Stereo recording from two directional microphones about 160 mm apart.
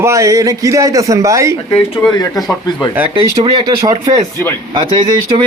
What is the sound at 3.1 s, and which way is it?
A man's voice, 30° right (ahead or behind).